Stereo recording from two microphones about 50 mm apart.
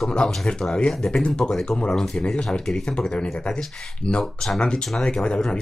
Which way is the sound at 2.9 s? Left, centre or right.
Left.